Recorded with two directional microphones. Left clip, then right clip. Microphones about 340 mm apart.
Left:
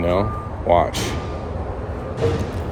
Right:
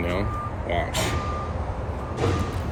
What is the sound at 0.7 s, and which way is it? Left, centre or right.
Speech, left.